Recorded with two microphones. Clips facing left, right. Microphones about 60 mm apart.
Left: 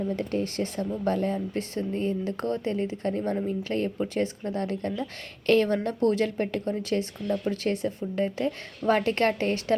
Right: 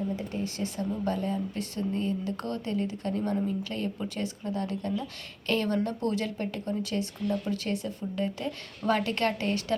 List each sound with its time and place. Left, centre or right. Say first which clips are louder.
0.2 s speech: left 5 dB; left
1.7 s speech: left 1 dB; left